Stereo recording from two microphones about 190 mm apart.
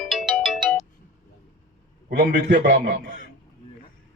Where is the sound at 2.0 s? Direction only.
60° right (ahead or behind).